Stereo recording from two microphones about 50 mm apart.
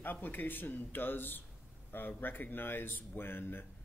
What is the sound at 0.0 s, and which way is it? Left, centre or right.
Speech, left.